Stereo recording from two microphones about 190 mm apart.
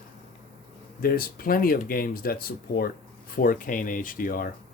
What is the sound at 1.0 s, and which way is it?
Speech, 50° left (ahead or behind).